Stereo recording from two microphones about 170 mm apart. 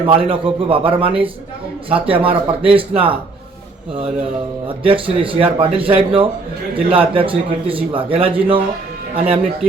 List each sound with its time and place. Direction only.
0.0 s a man's voice: 30° right (ahead or behind)
4.8 s a man's voice: 30° right (ahead or behind)